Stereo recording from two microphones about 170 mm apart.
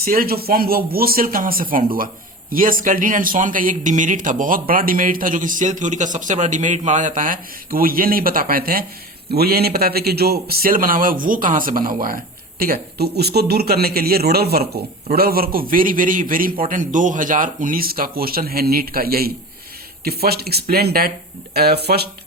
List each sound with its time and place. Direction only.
0.0 s a man's voice: 60° right (ahead or behind)